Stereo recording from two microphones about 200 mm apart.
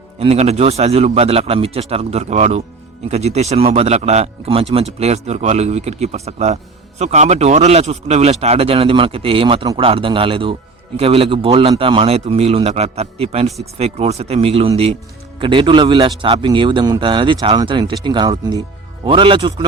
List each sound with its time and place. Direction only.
0.2 s a man's voice: 30° right (ahead or behind)